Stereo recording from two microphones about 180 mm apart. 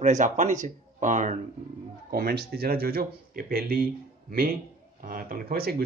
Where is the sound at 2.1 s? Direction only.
55° right (ahead or behind).